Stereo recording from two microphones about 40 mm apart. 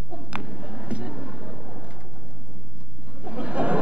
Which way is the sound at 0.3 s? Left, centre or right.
Right.